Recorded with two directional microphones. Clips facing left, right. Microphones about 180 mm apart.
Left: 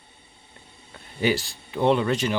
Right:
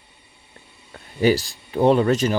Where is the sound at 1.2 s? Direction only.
40° right (ahead or behind).